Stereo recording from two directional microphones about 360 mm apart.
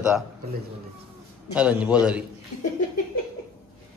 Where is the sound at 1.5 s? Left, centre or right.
Centre.